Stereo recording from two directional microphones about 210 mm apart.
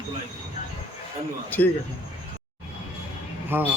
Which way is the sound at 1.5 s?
10° left (ahead or behind).